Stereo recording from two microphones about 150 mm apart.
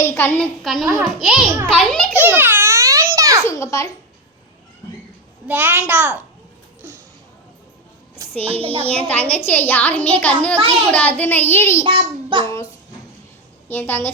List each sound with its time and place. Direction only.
0.0 s a sound: 15° left (ahead or behind)
0.6 s a child's voice: centre (ahead or behind)
2.2 s babbling: 15° right (ahead or behind)
3.4 s a child's voice: 20° left (ahead or behind)
5.5 s a child's voice: 10° right (ahead or behind)
8.4 s a child's voice: 40° right (ahead or behind)
8.9 s a child's voice: 10° left (ahead or behind)
11.9 s a child's voice: 35° right (ahead or behind)
13.7 s a child's voice: 10° left (ahead or behind)